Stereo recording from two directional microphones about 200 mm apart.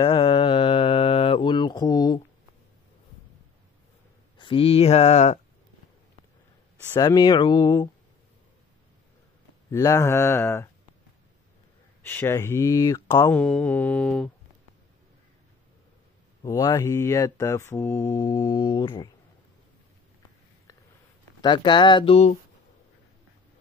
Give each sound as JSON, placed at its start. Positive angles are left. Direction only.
{"t": 0.0, "sound": "mantra", "side_deg": 25}
{"t": 4.4, "sound": "speech", "side_deg": 25}
{"t": 6.9, "sound": "speech", "side_deg": 15}
{"t": 9.7, "sound": "mantra", "side_deg": 15}
{"t": 12.0, "sound": "mantra", "side_deg": 10}
{"t": 16.4, "sound": "mantra", "side_deg": 15}
{"t": 21.4, "sound": "speech", "side_deg": 25}